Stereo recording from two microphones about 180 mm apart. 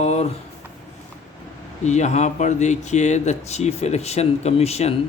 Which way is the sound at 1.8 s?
40° left (ahead or behind).